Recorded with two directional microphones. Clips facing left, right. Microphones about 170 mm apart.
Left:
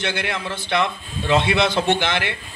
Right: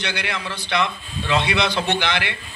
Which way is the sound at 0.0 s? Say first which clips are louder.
Left 2 dB; 50° left (ahead or behind).